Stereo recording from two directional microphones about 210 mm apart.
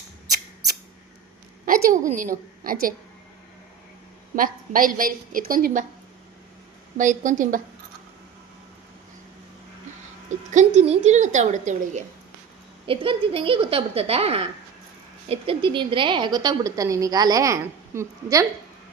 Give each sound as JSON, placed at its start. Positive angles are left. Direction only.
{"t": 1.6, "sound": "a woman's voice", "side_deg": -40}
{"t": 4.4, "sound": "a woman's voice", "side_deg": -40}
{"t": 6.9, "sound": "a woman's voice", "side_deg": -35}
{"t": 10.2, "sound": "a woman's voice", "side_deg": -35}